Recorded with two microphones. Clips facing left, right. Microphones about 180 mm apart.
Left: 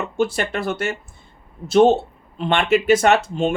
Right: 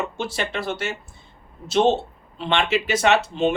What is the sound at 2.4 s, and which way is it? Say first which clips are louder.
Speech: left 4 dB; 50° left (ahead or behind).